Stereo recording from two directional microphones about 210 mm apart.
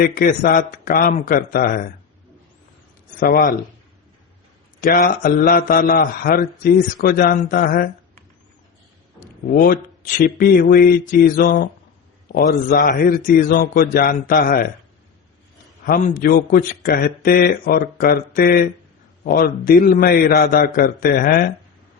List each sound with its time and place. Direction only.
0.0 s speech: 40° left (ahead or behind)
3.2 s a man's voice: 45° left (ahead or behind)
4.8 s a man's voice: 45° left (ahead or behind)
9.2 s a man's voice: 45° left (ahead or behind)
15.8 s a man's voice: 40° left (ahead or behind)